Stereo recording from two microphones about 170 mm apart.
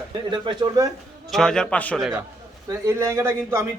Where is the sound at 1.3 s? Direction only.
5° left (ahead or behind).